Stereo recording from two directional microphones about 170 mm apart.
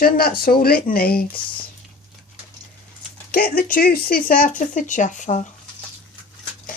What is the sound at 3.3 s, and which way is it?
A child's voice, 60° left (ahead or behind).